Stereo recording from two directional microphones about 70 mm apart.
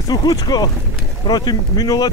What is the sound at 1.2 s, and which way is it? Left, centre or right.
Speech, left.